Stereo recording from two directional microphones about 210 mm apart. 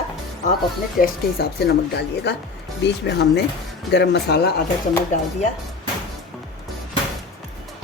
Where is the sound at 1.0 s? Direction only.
50° left (ahead or behind).